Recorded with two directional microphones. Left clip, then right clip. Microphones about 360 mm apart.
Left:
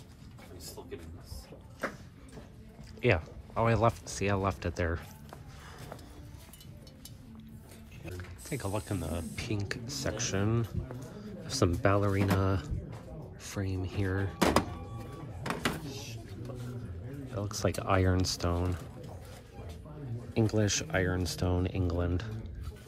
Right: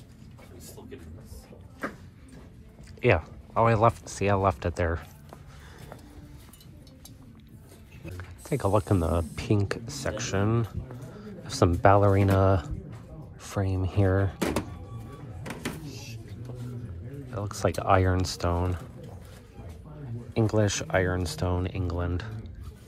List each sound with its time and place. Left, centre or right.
3.0 s speech: centre
8.2 s speech: centre
11.1 s a sound: centre
11.8 s speech: centre
15.8 s a sound: right
17.3 s speech: centre
20.3 s speech: centre